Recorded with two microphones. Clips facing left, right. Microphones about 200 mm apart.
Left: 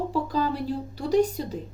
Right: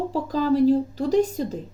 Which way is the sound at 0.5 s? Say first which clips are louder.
Right 12 dB; 90° right.